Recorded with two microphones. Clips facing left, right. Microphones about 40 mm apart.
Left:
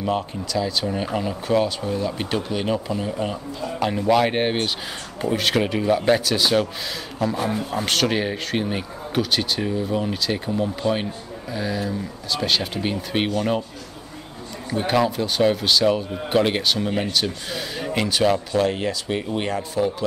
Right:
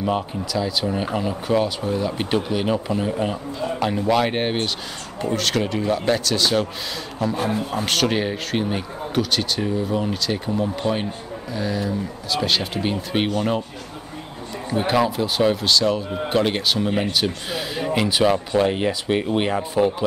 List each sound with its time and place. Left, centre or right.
0.0 s speech: centre
4.1 s a man's voice: centre
11.5 s speech: centre
14.7 s speech: centre